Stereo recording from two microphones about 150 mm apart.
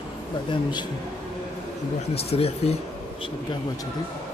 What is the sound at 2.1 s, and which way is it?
Speech, 40° left (ahead or behind).